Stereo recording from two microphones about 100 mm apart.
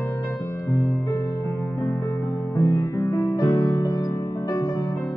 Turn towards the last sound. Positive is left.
turn(degrees=45)  # may be behind; listen again after turning